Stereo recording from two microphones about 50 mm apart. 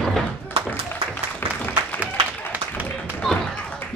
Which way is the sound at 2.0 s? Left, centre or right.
Right.